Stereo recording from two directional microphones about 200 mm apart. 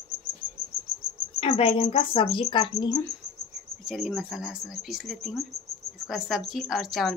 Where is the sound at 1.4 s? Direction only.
30° left (ahead or behind).